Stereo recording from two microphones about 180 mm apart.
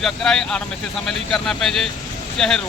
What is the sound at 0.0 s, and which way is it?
Speech, 5° left (ahead or behind).